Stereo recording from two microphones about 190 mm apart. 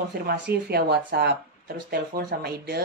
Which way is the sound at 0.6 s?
60° right (ahead or behind).